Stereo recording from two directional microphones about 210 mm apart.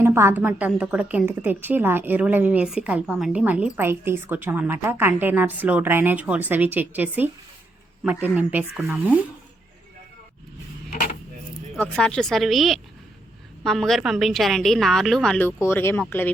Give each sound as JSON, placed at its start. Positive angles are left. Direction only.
{"t": 0.0, "sound": "a woman's voice", "side_deg": -10}
{"t": 11.8, "sound": "a woman's voice", "side_deg": 5}